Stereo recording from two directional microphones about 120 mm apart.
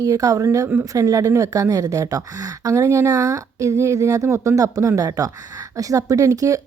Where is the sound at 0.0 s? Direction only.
30° right (ahead or behind).